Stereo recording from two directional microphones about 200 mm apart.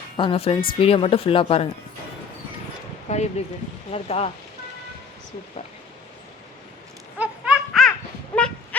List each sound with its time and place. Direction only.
0.2 s speech: 25° left (ahead or behind)
3.1 s speech: 35° left (ahead or behind)
7.2 s laughter: 5° right (ahead or behind)